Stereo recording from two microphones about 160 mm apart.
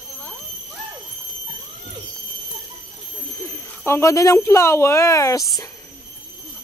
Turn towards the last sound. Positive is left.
turn(degrees=20)  # may be behind; listen again after turning